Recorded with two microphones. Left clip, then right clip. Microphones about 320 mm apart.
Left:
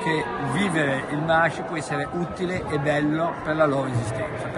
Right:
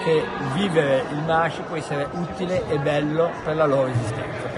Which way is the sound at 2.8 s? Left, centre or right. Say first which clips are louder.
Left 1 dB; centre.